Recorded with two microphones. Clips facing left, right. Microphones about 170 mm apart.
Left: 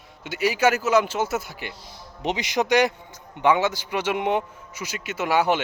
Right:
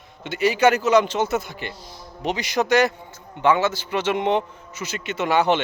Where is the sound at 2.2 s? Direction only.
20° left (ahead or behind).